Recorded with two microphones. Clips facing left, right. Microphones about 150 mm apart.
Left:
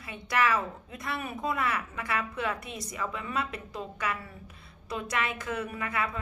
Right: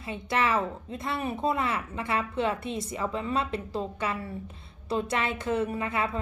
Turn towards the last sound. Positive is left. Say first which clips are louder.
# right 3 dB
turn(degrees=-25)  # may be behind; listen again after turning